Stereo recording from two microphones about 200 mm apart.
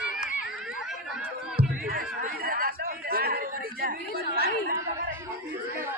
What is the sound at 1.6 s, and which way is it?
Chatter, 45° right (ahead or behind).